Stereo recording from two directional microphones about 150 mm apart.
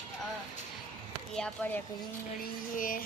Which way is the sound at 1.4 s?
10° left (ahead or behind).